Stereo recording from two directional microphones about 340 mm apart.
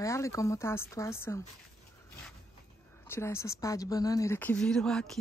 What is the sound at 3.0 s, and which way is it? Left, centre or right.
A woman's voice, centre.